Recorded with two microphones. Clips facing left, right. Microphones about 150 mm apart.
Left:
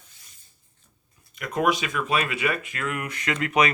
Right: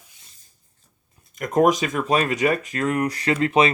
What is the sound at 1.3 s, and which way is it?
Speech, 45° right (ahead or behind).